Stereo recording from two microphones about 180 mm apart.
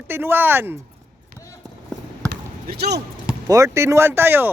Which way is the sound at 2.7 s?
65° right (ahead or behind).